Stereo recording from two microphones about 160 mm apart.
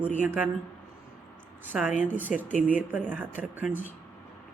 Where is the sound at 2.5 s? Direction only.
55° left (ahead or behind).